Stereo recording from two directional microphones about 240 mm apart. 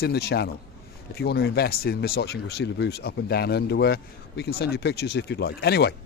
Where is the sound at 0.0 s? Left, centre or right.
Left.